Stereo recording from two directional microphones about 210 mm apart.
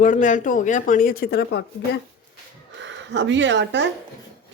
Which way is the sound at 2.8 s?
60° right (ahead or behind).